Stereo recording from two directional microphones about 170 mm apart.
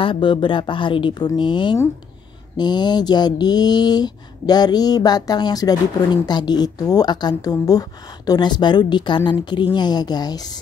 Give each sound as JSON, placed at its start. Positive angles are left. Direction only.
{"t": 0.0, "sound": "a woman's voice", "side_deg": 30}